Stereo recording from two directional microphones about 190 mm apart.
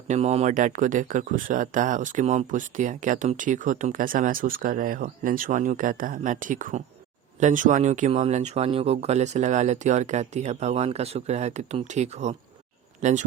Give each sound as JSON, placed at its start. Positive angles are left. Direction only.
{"t": 0.1, "sound": "speech", "side_deg": -35}